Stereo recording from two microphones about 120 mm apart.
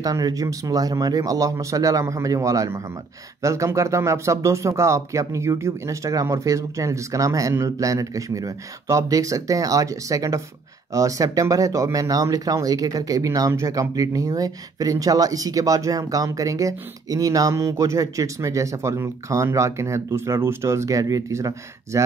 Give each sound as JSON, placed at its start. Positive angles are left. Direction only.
{"t": 0.0, "sound": "speech", "side_deg": -30}